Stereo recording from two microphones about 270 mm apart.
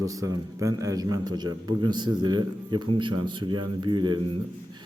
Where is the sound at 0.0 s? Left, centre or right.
Centre.